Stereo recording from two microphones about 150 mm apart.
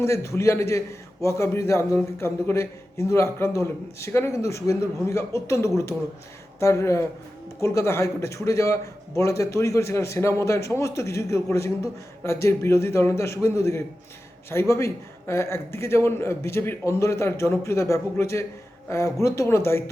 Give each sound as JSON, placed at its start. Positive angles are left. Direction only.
{"t": 0.0, "sound": "a man's voice", "side_deg": 20}